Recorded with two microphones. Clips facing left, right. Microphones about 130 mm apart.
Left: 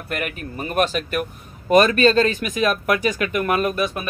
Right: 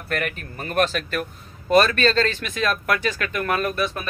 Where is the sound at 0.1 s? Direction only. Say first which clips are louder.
Even; 10° left (ahead or behind).